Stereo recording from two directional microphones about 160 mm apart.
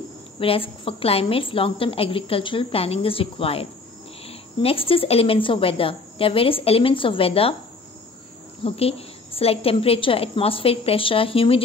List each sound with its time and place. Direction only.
0.4 s a woman's voice: 35° left (ahead or behind)
8.6 s a woman's voice: 40° left (ahead or behind)